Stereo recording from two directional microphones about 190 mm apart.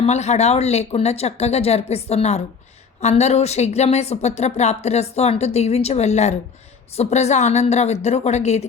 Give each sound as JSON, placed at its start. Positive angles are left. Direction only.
{"t": 0.0, "sound": "a woman's voice", "side_deg": 35}